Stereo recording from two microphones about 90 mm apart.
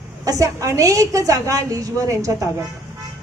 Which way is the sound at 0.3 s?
35° right (ahead or behind).